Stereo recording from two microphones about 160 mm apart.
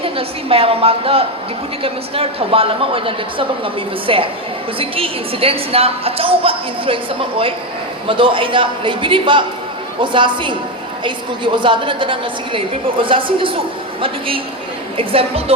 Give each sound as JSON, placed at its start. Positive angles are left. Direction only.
{"t": 0.0, "sound": "a woman's voice", "side_deg": -35}